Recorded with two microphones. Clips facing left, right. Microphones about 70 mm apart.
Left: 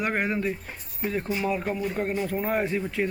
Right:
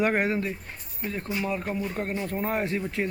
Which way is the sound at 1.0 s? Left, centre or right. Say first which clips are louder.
Left 3 dB; centre.